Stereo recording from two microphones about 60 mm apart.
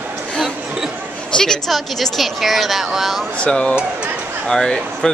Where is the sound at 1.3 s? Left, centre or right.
Centre.